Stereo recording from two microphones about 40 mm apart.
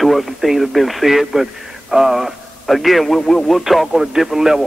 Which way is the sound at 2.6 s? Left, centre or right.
Centre.